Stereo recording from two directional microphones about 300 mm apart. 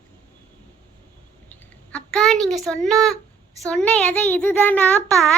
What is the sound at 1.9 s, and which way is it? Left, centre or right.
A child's voice, centre.